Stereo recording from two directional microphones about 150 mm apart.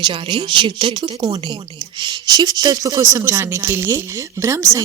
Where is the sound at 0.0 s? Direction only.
30° right (ahead or behind).